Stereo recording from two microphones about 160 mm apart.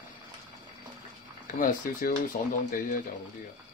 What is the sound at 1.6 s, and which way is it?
Speech, 65° left (ahead or behind).